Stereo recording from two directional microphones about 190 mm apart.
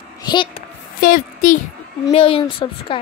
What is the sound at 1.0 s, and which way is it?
Speech, 45° left (ahead or behind).